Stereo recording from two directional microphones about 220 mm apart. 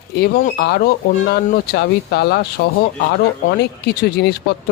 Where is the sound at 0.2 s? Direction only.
45° left (ahead or behind).